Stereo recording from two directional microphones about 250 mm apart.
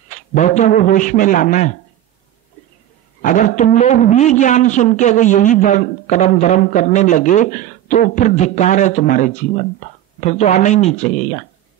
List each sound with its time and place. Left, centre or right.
0.1 s a man's voice: left
3.2 s a man's voice: left